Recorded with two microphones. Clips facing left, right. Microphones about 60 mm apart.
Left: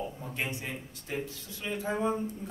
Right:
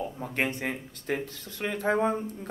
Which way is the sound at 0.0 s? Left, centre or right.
Right.